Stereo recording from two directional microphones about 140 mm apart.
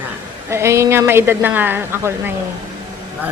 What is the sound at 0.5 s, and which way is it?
A woman's voice, 20° right (ahead or behind).